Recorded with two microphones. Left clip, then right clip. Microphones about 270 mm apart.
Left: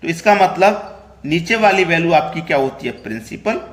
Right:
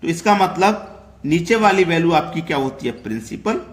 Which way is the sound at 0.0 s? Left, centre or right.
Centre.